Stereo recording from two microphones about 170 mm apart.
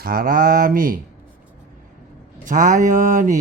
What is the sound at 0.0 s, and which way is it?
Speech, 60° right (ahead or behind).